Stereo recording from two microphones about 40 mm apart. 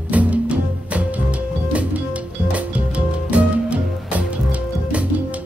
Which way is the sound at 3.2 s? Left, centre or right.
Right.